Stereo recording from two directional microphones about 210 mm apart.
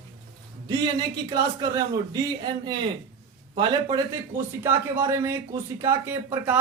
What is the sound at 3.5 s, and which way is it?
A man's voice, 20° right (ahead or behind).